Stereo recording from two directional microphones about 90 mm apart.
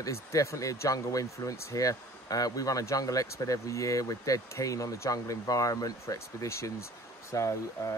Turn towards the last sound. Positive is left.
turn(degrees=35)  # may be behind; listen again after turning